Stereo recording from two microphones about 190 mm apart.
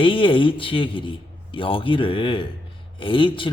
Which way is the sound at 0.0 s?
25° left (ahead or behind).